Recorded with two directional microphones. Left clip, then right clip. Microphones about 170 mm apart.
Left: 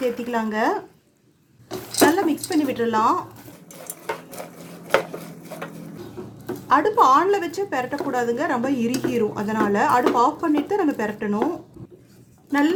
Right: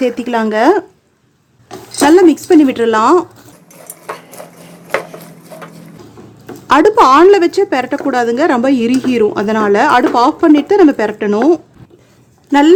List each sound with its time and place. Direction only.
0.0 s a woman's voice: 40° right (ahead or behind)
2.0 s a woman's voice: 55° right (ahead or behind)
6.7 s a woman's voice: 55° right (ahead or behind)
12.5 s speech: 60° right (ahead or behind)